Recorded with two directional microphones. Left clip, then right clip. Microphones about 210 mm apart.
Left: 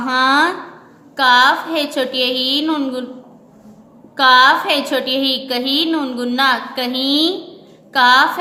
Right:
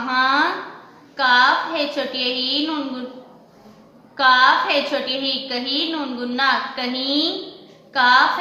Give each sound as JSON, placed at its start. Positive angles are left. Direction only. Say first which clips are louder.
{"t": 0.1, "sound": "a sound", "louder": "left 4 dB", "side_deg": 55}
{"t": 1.1, "sound": "a woman's voice", "louder": "left 4 dB", "side_deg": 50}
{"t": 4.2, "sound": "a woman's voice", "louder": "left 4 dB", "side_deg": 50}